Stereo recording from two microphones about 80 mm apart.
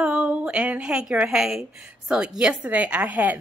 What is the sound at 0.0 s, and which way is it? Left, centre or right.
A woman's voice, centre.